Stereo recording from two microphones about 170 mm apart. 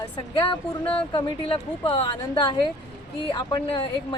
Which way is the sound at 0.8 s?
10° left (ahead or behind).